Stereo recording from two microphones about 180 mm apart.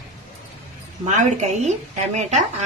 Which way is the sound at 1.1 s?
40° right (ahead or behind).